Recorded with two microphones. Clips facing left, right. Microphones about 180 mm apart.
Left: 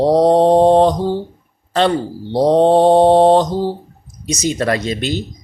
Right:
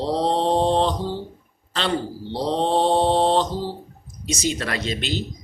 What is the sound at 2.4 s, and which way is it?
Mantra, 50° left (ahead or behind).